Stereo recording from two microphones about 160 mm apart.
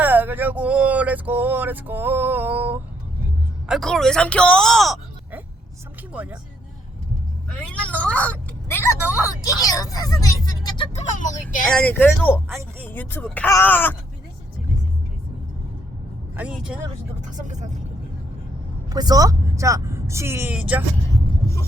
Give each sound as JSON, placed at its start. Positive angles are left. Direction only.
{"t": 0.0, "sound": "speech", "side_deg": -10}
{"t": 3.7, "sound": "speech", "side_deg": 0}
{"t": 6.1, "sound": "speech", "side_deg": -10}
{"t": 7.7, "sound": "speech", "side_deg": 10}
{"t": 9.4, "sound": "speech", "side_deg": 20}
{"t": 10.9, "sound": "speech", "side_deg": 50}
{"t": 11.7, "sound": "speech", "side_deg": 10}
{"t": 16.4, "sound": "speech", "side_deg": -5}
{"t": 17.2, "sound": "speech", "side_deg": -50}
{"t": 18.9, "sound": "speech", "side_deg": -25}
{"t": 21.4, "sound": "a sound", "side_deg": 20}